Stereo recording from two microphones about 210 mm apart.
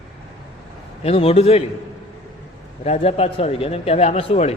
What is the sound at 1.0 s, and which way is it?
Speech, 30° left (ahead or behind).